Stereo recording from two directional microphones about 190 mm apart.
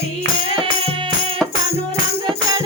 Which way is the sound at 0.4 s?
25° right (ahead or behind).